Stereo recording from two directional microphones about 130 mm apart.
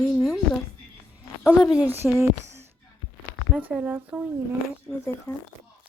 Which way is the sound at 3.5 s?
10° right (ahead or behind).